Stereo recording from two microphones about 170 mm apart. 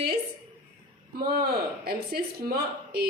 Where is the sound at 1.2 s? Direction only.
65° right (ahead or behind).